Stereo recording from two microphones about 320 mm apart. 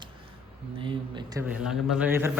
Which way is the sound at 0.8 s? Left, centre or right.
Centre.